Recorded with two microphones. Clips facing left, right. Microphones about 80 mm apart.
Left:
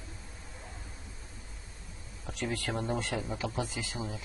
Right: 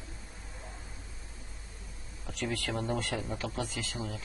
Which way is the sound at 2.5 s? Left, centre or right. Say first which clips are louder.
Even; centre.